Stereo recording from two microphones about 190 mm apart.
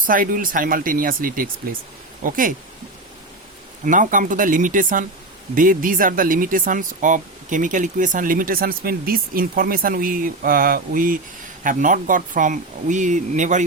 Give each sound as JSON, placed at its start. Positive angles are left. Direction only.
{"t": 0.0, "sound": "speech", "side_deg": -45}
{"t": 3.8, "sound": "speech", "side_deg": -45}